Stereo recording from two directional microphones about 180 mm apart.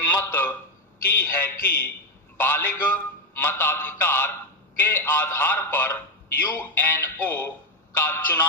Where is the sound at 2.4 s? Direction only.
10° left (ahead or behind).